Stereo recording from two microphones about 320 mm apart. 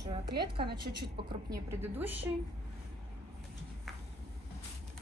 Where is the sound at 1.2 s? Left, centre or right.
Centre.